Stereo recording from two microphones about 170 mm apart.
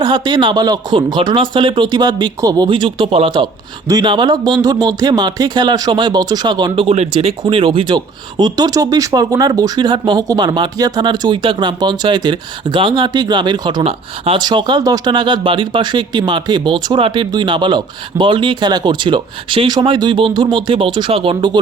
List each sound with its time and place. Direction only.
0.0 s speech: 25° right (ahead or behind)